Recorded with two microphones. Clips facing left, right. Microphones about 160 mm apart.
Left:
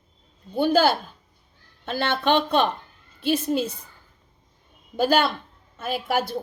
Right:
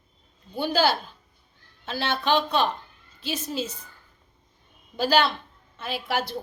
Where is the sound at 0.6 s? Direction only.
50° left (ahead or behind).